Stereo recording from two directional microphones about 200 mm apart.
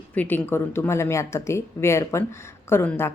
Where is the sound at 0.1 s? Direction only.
10° left (ahead or behind).